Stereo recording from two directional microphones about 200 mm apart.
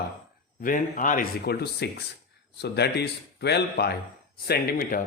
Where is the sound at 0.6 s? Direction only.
45° left (ahead or behind).